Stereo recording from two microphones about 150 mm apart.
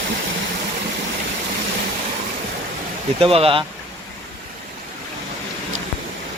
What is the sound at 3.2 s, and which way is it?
Speech, 40° right (ahead or behind).